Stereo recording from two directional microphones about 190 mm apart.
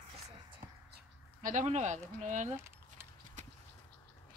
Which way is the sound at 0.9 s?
45° right (ahead or behind).